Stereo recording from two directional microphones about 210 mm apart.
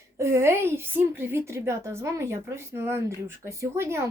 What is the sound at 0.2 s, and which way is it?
Speech, 10° right (ahead or behind).